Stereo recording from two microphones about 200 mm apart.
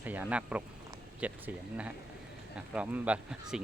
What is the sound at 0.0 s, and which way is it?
Speech, 10° right (ahead or behind).